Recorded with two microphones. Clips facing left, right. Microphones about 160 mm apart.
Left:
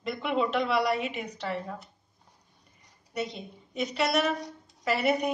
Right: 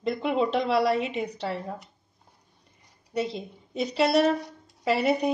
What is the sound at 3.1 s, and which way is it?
A woman's voice, 30° right (ahead or behind).